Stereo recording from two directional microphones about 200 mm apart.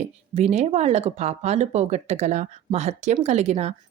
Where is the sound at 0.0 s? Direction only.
35° right (ahead or behind).